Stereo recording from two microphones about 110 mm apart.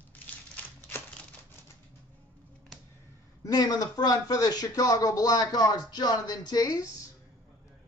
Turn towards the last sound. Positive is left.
turn(degrees=35)  # may be behind; listen again after turning